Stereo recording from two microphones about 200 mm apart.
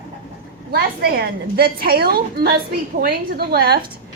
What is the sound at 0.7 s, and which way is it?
A woman's voice, 50° right (ahead or behind).